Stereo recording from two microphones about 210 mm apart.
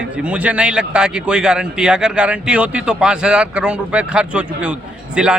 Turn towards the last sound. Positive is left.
turn(degrees=-5)  # may be behind; listen again after turning